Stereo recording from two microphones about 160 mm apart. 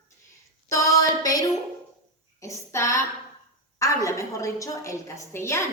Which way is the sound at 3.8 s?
20° left (ahead or behind).